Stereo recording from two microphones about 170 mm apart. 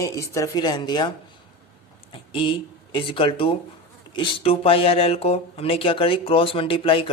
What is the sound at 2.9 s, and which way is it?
Speech, 30° left (ahead or behind).